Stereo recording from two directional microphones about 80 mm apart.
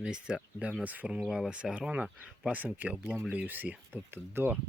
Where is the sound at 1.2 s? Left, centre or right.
Centre.